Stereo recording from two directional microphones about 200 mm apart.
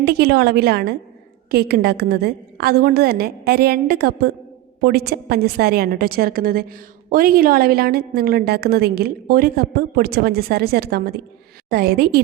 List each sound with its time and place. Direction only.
0.0 s a woman's voice: 55° right (ahead or behind)